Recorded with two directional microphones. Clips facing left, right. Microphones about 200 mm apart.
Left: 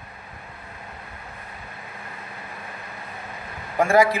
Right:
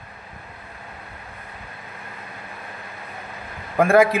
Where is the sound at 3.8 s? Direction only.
60° right (ahead or behind).